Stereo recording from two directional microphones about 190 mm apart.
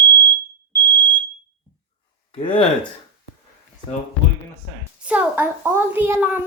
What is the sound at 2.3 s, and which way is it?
Speech, 25° left (ahead or behind).